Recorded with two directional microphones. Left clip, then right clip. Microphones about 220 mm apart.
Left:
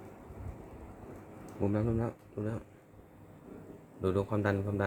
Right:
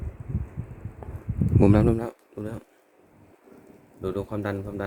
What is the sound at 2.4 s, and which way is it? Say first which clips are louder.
Speech: right 2 dB; 25° right (ahead or behind).